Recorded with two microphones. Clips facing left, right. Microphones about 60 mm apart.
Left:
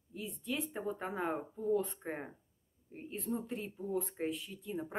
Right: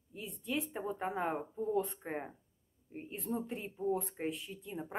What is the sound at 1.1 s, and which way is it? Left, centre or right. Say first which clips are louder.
Speech: right 1 dB; centre.